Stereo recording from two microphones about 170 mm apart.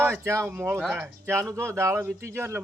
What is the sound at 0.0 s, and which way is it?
Speech, 15° right (ahead or behind).